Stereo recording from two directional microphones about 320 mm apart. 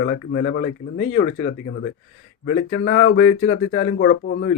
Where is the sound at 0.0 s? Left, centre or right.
Left.